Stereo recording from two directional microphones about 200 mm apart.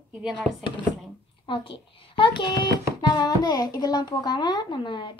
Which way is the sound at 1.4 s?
25° left (ahead or behind).